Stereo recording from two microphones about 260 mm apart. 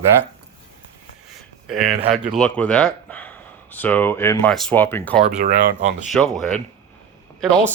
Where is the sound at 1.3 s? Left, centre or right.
Centre.